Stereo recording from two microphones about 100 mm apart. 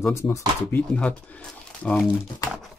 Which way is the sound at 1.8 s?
10° left (ahead or behind).